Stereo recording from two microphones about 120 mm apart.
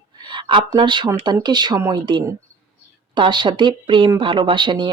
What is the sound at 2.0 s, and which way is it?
Speech, 40° right (ahead or behind).